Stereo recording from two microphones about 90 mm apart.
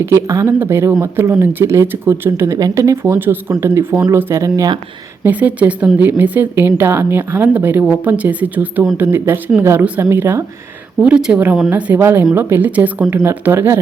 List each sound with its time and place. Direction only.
0.0 s speech: 35° right (ahead or behind)
0.4 s a woman's voice: 25° right (ahead or behind)
2.6 s a woman's voice: 40° right (ahead or behind)
5.2 s a woman's voice: 15° right (ahead or behind)
11.0 s a woman's voice: 10° right (ahead or behind); by 13.7 s 25° right (ahead or behind)